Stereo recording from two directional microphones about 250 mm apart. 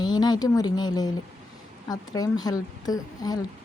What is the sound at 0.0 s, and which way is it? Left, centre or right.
Speech, centre.